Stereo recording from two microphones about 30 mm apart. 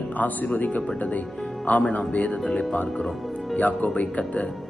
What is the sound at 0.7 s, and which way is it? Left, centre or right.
Speech, left.